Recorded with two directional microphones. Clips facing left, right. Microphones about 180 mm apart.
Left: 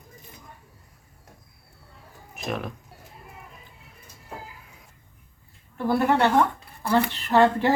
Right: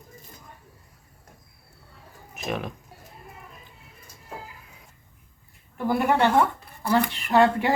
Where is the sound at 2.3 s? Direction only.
Centre (ahead or behind).